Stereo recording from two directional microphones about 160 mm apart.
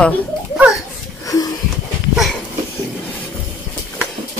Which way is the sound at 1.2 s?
20° left (ahead or behind).